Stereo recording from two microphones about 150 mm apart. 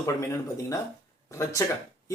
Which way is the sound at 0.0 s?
20° left (ahead or behind).